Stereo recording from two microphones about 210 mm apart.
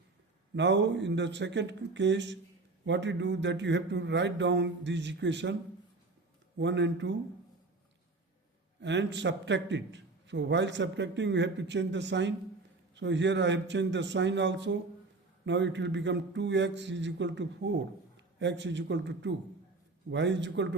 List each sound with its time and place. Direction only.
0.5 s a man's voice: 55° right (ahead or behind)
6.6 s a man's voice: 60° right (ahead or behind)
8.8 s a man's voice: 55° right (ahead or behind)